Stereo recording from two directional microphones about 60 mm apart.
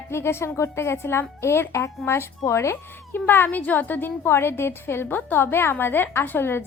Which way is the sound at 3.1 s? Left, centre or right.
Left.